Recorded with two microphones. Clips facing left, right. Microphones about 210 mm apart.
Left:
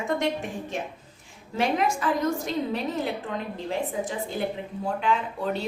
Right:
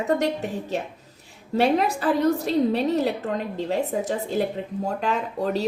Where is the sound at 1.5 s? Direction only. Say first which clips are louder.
Right 4 dB; 35° right (ahead or behind).